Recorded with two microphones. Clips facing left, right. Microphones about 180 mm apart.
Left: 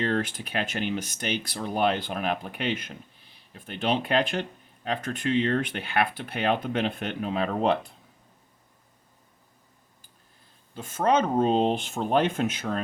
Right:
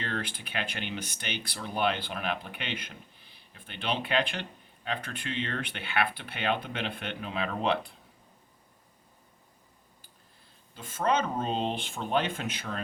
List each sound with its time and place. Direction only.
0.0 s speech: 45° left (ahead or behind)
10.8 s speech: 45° left (ahead or behind)